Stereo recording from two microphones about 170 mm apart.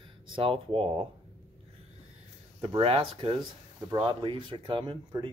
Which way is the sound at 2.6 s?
35° right (ahead or behind).